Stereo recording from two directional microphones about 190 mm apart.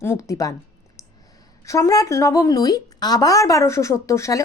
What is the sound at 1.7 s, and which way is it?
A woman's voice, 15° left (ahead or behind).